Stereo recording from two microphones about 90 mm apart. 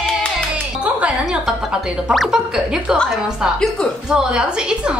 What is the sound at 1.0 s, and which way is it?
Speech, 10° right (ahead or behind).